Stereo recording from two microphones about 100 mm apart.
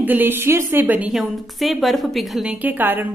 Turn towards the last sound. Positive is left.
turn(degrees=-20)  # may be behind; listen again after turning